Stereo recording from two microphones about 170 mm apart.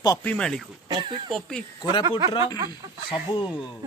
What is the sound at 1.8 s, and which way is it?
Speech, 25° left (ahead or behind).